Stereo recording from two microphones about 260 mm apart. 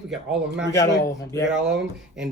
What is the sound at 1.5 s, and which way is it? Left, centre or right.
Speech, centre.